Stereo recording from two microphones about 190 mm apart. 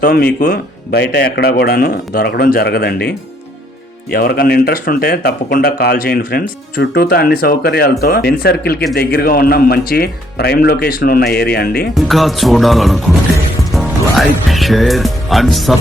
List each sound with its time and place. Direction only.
0.0 s speech: 55° left (ahead or behind)
4.1 s speech: 50° left (ahead or behind)
11.9 s speech: centre (ahead or behind)